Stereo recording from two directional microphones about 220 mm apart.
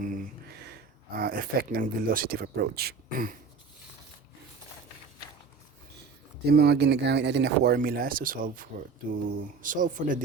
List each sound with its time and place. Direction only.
0.0 s a sound: 40° right (ahead or behind)
1.1 s speech: 40° right (ahead or behind)
6.5 s speech: 50° right (ahead or behind)